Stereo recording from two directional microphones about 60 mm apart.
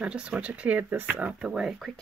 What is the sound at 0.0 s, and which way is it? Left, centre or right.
Speech, centre.